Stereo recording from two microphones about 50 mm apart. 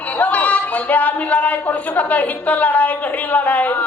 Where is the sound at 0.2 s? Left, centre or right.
Left.